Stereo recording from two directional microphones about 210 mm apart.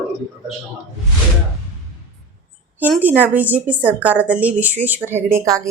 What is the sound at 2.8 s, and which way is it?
A woman's voice, 10° right (ahead or behind).